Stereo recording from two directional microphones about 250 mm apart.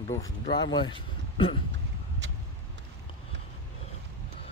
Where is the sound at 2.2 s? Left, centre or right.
Right.